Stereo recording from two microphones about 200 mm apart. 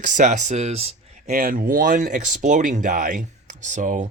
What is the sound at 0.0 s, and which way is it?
Speech, 40° right (ahead or behind).